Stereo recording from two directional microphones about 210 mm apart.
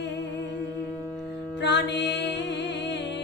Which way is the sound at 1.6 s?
55° left (ahead or behind).